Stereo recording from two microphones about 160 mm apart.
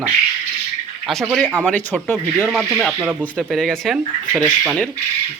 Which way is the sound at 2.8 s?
5° right (ahead or behind).